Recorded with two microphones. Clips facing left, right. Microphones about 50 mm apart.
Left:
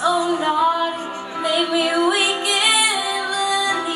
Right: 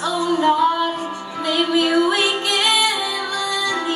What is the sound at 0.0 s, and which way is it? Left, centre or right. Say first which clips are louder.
Female singing: even; centre.